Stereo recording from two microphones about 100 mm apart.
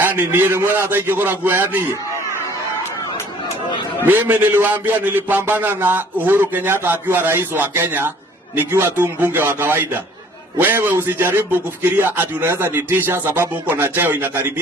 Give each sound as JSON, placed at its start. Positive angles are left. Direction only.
{"t": 0.0, "sound": "a man's voice", "side_deg": -20}
{"t": 4.0, "sound": "a man's voice", "side_deg": -20}